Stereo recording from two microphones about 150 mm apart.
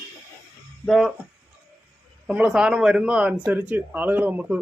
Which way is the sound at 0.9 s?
Centre (ahead or behind).